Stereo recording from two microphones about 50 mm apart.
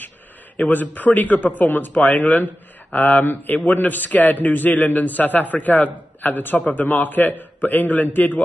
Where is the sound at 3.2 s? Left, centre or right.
Left.